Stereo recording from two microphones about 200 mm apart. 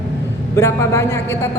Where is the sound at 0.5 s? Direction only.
15° left (ahead or behind).